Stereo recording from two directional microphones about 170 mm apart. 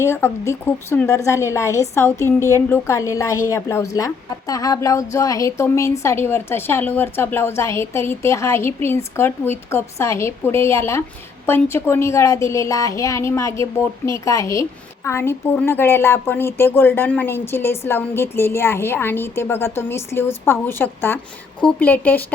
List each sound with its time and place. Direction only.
0.0 s a woman's voice: 15° left (ahead or behind)